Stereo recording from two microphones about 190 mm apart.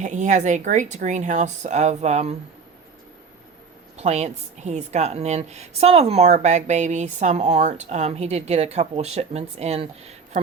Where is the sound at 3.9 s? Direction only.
35° right (ahead or behind).